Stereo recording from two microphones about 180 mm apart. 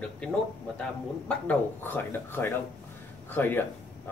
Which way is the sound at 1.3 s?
10° left (ahead or behind).